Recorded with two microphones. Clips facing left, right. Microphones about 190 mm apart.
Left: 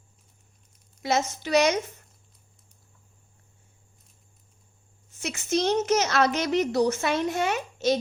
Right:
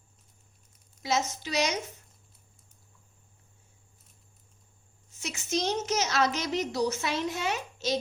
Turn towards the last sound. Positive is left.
turn(degrees=55)  # may be behind; listen again after turning